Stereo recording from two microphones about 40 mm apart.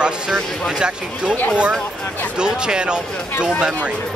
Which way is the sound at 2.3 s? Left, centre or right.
Right.